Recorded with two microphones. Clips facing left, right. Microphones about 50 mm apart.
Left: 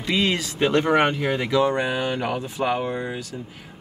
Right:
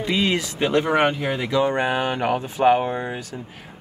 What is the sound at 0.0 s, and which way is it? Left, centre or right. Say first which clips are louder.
Speech: right 1 dB; centre.